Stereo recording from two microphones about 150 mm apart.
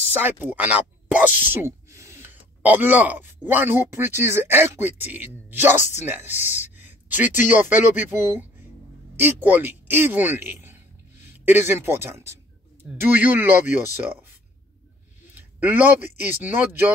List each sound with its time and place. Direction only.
0.1 s speech: 15° right (ahead or behind)
15.3 s a sound: 10° right (ahead or behind)
16.2 s speech: 15° right (ahead or behind)